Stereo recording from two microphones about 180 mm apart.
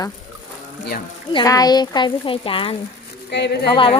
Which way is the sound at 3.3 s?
70° left (ahead or behind).